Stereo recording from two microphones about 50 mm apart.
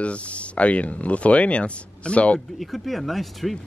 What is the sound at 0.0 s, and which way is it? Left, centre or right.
Speech, left.